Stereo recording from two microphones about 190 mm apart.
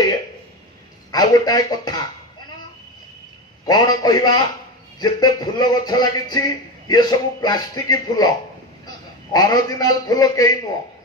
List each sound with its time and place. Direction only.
1.1 s a man's voice: 20° left (ahead or behind)
3.6 s a man's voice: 20° left (ahead or behind)